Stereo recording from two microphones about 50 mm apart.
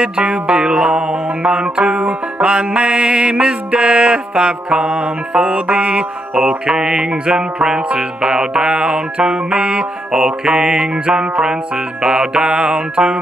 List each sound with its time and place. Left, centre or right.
0.3 s music: centre
6.3 s music: centre